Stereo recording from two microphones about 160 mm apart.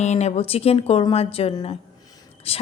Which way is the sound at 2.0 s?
25° left (ahead or behind).